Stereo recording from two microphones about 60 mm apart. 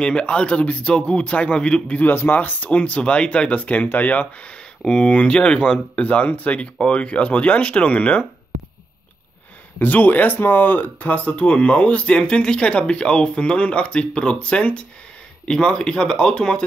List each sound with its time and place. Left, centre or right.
0.0 s speech: centre
2.0 s speech: left
9.8 s speech: left; by 16.6 s centre